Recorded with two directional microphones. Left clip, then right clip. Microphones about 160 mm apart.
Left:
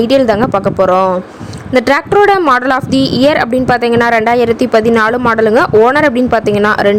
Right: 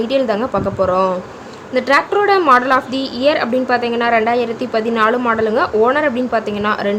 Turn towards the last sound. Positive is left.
turn(degrees=50)  # may be behind; listen again after turning